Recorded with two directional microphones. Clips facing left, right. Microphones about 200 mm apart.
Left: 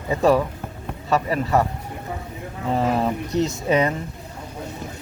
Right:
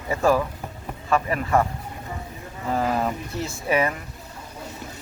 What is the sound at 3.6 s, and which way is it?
Speech, 20° left (ahead or behind).